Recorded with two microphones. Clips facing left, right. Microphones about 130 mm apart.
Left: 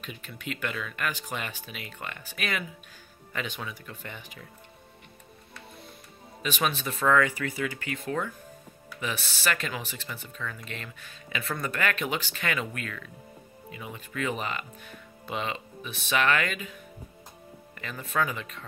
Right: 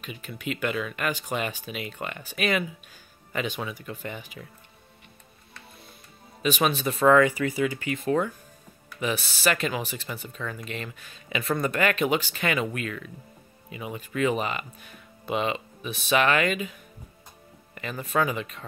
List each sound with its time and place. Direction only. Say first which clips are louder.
0.0 s speech: right 4 dB; 10° right (ahead or behind)
6.4 s speech: right 5 dB; 15° right (ahead or behind)
17.7 s speech: right 3 dB; 20° right (ahead or behind)